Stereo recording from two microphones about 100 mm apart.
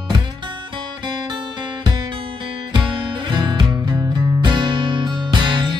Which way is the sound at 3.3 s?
50° right (ahead or behind).